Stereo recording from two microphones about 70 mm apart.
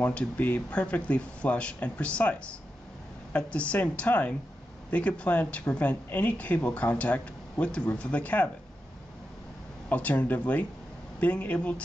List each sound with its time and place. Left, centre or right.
0.0 s speech: centre
3.3 s speech: centre
9.8 s speech: left